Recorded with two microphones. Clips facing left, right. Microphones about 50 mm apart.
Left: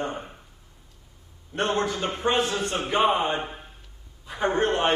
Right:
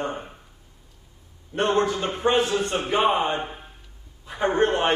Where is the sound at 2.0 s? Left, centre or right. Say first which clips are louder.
Right 3 dB; centre.